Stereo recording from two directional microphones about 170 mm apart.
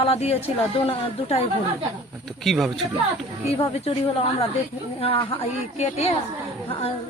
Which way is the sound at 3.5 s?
35° left (ahead or behind).